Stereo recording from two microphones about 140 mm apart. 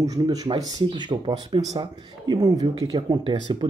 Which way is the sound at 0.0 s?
25° right (ahead or behind).